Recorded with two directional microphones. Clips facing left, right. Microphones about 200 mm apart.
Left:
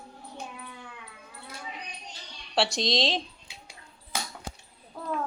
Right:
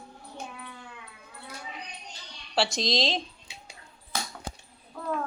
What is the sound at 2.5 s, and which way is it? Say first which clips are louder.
Speech: left 1 dB; centre (ahead or behind).